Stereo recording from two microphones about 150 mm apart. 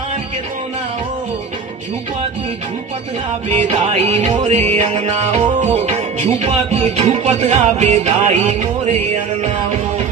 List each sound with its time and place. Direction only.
3.5 s music: 40° right (ahead or behind)